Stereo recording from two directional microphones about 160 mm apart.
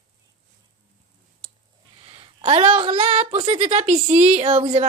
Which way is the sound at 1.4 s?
30° right (ahead or behind).